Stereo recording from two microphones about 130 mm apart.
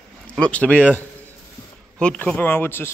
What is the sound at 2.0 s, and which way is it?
Speech, 5° left (ahead or behind).